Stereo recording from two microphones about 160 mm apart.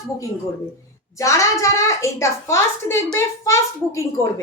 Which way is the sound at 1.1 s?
20° left (ahead or behind).